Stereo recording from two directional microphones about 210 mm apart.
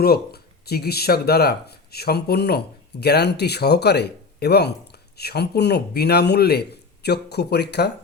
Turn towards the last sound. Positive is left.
turn(degrees=50)  # may be behind; listen again after turning